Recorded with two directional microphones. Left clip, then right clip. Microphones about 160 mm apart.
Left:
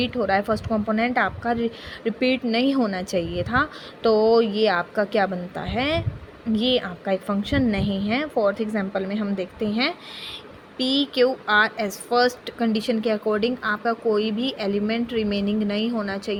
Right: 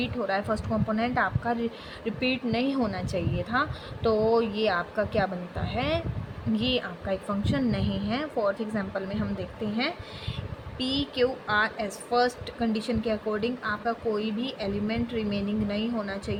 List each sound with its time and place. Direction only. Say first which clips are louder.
0.0 s a woman's voice: left 7 dB; 45° left (ahead or behind)